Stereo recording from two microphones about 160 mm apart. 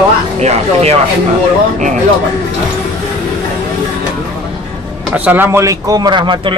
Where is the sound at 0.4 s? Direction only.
45° right (ahead or behind).